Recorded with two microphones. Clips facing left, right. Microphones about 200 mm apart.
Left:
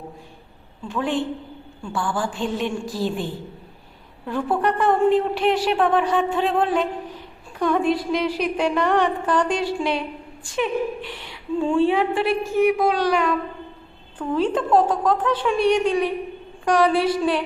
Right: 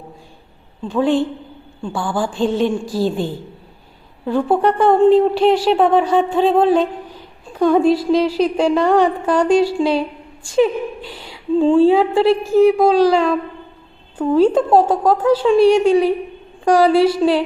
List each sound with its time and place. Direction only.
0.9 s a woman's voice: 30° right (ahead or behind)
4.3 s a woman's voice: 30° right (ahead or behind)